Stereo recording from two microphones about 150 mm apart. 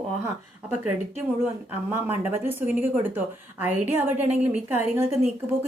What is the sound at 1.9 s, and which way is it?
A woman's voice, 15° right (ahead or behind).